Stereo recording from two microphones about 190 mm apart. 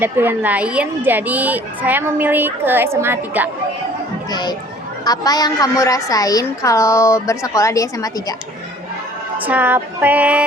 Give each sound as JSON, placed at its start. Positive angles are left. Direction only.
{"t": 0.0, "sound": "a woman's voice", "side_deg": -10}
{"t": 4.3, "sound": "a woman's voice", "side_deg": 20}
{"t": 9.4, "sound": "a woman's voice", "side_deg": -10}